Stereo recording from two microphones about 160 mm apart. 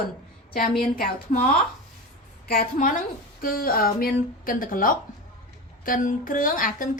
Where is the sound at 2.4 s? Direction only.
65° left (ahead or behind).